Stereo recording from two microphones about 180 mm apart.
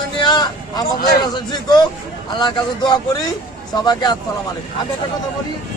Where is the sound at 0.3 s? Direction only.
25° left (ahead or behind).